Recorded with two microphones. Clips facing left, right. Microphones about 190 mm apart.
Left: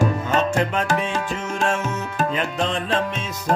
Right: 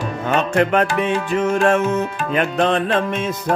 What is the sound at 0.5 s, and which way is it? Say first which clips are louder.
Music: right 5 dB; 60° right (ahead or behind).